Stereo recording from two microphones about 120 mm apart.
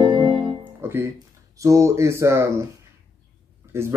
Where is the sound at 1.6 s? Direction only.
25° right (ahead or behind).